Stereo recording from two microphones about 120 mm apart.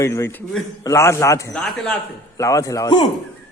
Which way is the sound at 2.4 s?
25° left (ahead or behind).